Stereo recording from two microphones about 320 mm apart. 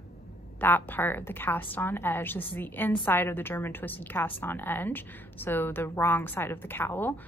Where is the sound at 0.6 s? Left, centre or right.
Centre.